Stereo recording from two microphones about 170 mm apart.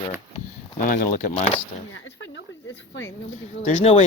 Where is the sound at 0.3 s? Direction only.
50° left (ahead or behind).